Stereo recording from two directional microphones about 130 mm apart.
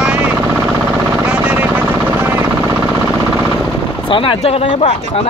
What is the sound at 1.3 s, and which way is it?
Vehicle, 10° right (ahead or behind).